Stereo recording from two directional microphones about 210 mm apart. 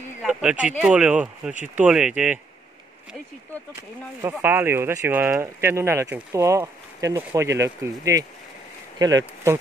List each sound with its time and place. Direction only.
0.2 s speech: 5° right (ahead or behind)
4.2 s speech: 10° right (ahead or behind)